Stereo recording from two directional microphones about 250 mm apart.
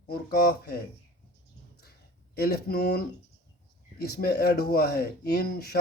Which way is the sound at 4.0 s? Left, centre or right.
Left.